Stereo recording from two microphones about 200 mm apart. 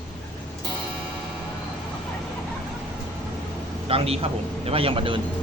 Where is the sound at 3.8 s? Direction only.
30° right (ahead or behind).